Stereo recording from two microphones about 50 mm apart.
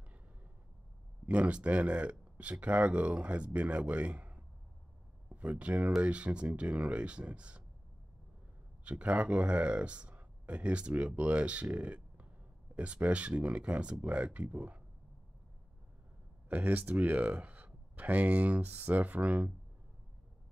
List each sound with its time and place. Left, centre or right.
1.2 s speech: right
8.8 s speech: right
16.4 s speech: right